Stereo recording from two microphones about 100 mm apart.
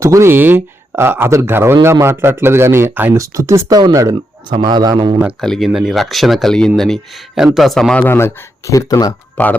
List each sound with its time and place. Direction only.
0.0 s speech: 30° right (ahead or behind)
3.7 s a man's voice: 40° right (ahead or behind)
5.4 s speech: centre (ahead or behind)
7.9 s speech: 20° left (ahead or behind); by 9.1 s 40° left (ahead or behind)
9.4 s speech: 20° left (ahead or behind)